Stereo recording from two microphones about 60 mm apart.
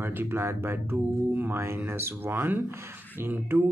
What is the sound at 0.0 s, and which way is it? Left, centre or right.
Speech, right.